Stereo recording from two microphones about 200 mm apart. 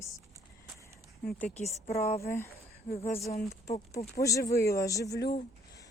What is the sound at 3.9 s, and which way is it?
Speech, 15° left (ahead or behind).